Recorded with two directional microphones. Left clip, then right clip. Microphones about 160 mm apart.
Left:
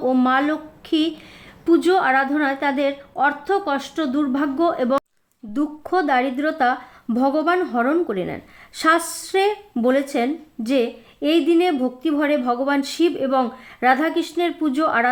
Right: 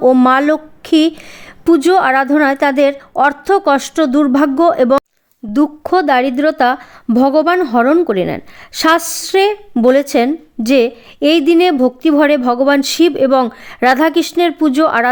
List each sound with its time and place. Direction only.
0.0 s a woman's voice: 65° right (ahead or behind)
5.5 s a woman's voice: 50° right (ahead or behind)